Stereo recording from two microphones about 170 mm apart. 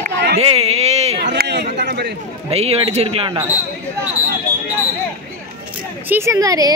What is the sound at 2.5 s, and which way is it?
Speech, 35° right (ahead or behind).